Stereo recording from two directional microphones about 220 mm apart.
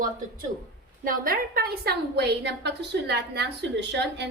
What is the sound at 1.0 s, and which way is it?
A woman's voice, 40° right (ahead or behind).